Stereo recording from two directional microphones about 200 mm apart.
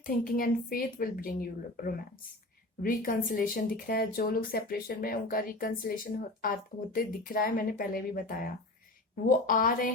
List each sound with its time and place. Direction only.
0.0 s speech: 45° left (ahead or behind)
9.5 s speech: 45° left (ahead or behind)